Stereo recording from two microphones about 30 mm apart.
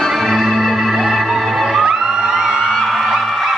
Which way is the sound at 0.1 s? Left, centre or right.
Centre.